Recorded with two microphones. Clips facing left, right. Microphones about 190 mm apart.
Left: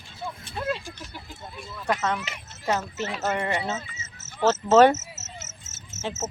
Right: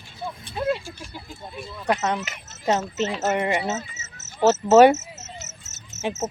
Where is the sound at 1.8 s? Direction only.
20° right (ahead or behind).